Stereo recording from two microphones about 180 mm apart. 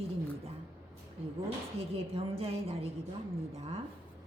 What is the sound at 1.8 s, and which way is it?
A woman's voice, 30° right (ahead or behind).